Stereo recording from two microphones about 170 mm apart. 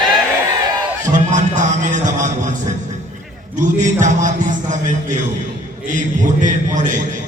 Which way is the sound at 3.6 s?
45° right (ahead or behind).